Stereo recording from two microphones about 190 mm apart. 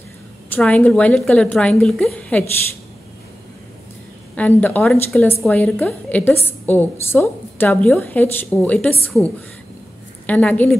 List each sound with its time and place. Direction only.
0.5 s a woman's voice: 10° left (ahead or behind)
4.4 s a woman's voice: 10° left (ahead or behind)